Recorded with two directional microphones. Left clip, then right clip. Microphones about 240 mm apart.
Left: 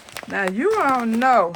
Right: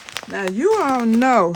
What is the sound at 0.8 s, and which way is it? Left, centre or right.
Speech, right.